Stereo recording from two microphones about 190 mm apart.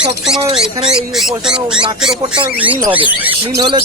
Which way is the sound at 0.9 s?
Centre (ahead or behind).